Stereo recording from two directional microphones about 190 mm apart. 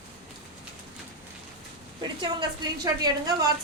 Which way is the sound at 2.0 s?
25° right (ahead or behind).